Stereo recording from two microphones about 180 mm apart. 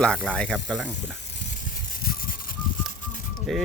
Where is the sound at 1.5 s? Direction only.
50° left (ahead or behind).